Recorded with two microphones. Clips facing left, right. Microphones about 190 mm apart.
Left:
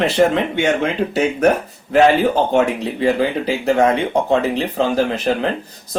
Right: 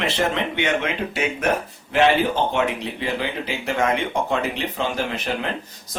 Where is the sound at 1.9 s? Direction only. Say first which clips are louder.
Left 5 dB; 40° left (ahead or behind).